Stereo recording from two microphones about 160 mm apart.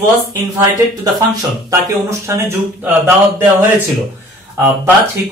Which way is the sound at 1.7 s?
20° right (ahead or behind).